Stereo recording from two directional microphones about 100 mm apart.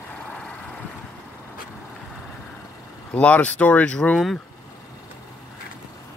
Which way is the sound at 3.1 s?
15° left (ahead or behind).